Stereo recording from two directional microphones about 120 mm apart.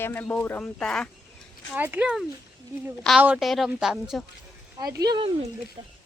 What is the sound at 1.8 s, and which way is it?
Speech, 15° right (ahead or behind).